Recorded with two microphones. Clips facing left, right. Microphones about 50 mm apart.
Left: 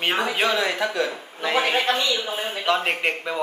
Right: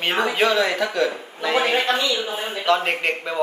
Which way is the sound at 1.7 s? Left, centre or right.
Right.